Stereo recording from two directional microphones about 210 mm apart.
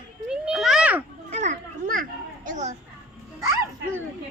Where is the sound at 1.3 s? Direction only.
35° right (ahead or behind).